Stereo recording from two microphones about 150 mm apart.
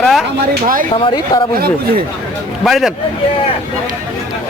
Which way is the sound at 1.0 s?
30° left (ahead or behind).